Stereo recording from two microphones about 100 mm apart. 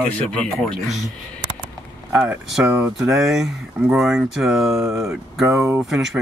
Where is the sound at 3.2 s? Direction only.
5° right (ahead or behind).